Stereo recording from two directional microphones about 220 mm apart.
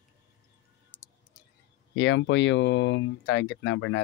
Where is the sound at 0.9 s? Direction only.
10° left (ahead or behind).